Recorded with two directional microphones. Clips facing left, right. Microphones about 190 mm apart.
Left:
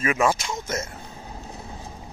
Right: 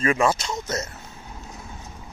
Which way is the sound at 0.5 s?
25° left (ahead or behind).